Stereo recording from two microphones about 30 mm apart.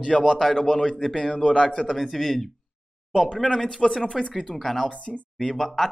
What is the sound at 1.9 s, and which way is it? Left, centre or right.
Speech, centre.